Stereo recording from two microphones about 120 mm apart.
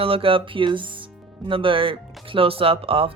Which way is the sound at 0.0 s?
50° right (ahead or behind).